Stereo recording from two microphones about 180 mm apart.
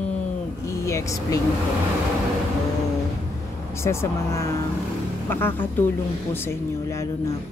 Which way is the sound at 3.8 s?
15° left (ahead or behind).